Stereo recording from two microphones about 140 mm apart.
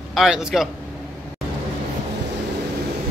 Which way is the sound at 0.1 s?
5° right (ahead or behind).